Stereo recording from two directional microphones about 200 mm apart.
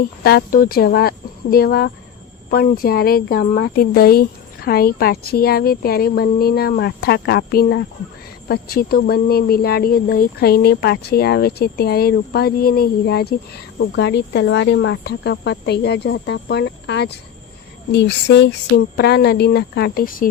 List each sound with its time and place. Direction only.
0.2 s speech: 50° left (ahead or behind)
13.7 s speech: 60° left (ahead or behind); by 20.3 s 45° left (ahead or behind)